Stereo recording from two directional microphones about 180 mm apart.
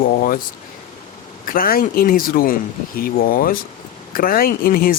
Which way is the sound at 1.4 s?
50° left (ahead or behind).